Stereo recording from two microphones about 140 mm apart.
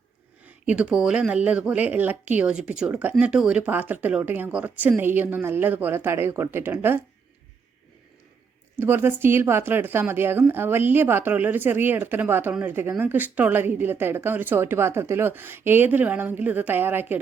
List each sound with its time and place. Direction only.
0.4 s speech: 10° right (ahead or behind)
8.8 s speech: 15° right (ahead or behind)